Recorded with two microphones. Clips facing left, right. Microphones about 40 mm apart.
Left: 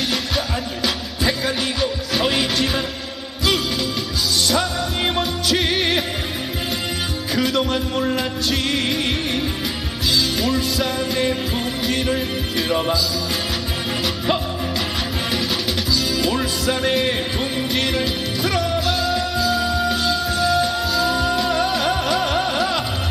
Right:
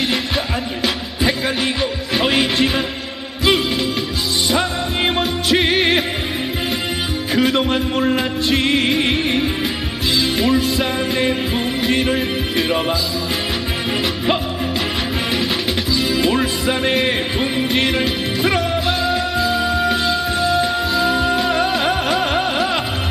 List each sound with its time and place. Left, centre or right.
0.8 s music: centre
4.5 s music: right
7.3 s music: right
15.9 s music: right